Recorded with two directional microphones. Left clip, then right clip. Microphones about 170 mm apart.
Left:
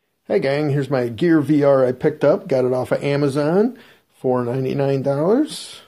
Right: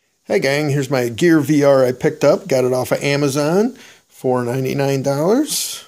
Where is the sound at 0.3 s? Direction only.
30° right (ahead or behind).